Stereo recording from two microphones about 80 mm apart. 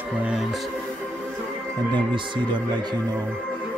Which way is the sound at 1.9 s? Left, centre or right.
Right.